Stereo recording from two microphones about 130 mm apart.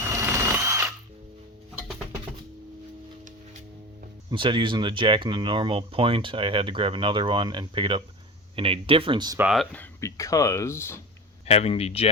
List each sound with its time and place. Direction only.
0.0 s drill: 20° right (ahead or behind)
4.3 s speech: 40° right (ahead or behind)
10.0 s speech: 25° left (ahead or behind)
11.4 s speech: 55° left (ahead or behind)